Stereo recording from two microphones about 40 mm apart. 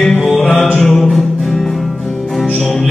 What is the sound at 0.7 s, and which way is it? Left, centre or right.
Music, centre.